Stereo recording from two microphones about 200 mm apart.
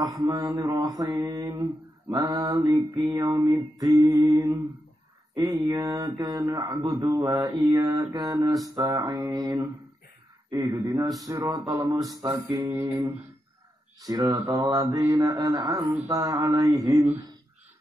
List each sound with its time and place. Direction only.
0.0 s mantra: 20° right (ahead or behind)